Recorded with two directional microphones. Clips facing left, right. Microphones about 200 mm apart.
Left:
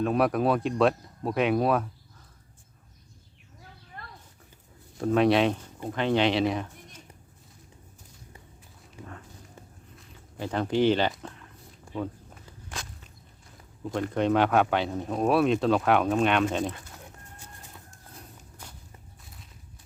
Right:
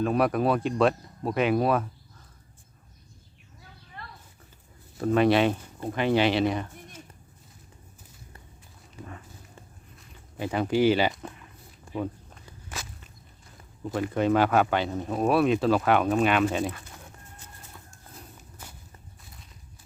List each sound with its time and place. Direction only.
0.0 s speech: centre (ahead or behind)
4.0 s a sound: 50° left (ahead or behind)
4.9 s speech: centre (ahead or behind)
10.3 s speech: 10° right (ahead or behind)
11.2 s a sound: 10° right (ahead or behind)
11.9 s speech: 10° right (ahead or behind)
12.6 s walk: 5° right (ahead or behind)
13.9 s speech: 5° right (ahead or behind)
17.3 s chicken: 15° left (ahead or behind)
18.6 s walk: 5° right (ahead or behind)